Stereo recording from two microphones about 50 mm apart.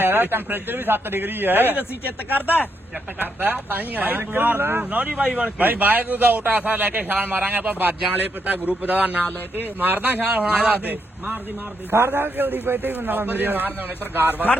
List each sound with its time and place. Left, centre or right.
0.0 s speech: right
3.2 s a man's voice: right
11.9 s a man's voice: right